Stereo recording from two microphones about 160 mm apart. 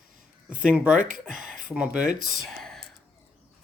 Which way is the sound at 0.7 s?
5° right (ahead or behind).